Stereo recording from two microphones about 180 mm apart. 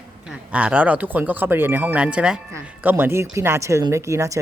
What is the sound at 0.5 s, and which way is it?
Speech, 5° right (ahead or behind).